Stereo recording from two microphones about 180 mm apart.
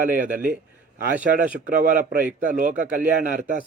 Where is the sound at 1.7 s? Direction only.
50° right (ahead or behind).